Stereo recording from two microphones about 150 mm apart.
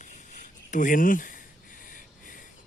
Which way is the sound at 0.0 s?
55° left (ahead or behind).